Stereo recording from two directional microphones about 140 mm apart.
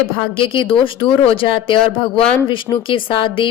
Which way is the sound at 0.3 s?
40° left (ahead or behind).